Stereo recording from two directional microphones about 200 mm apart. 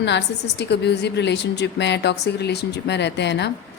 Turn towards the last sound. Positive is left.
turn(degrees=60)  # may be behind; listen again after turning